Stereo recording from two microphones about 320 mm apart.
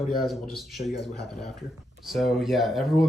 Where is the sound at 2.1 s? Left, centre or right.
Centre.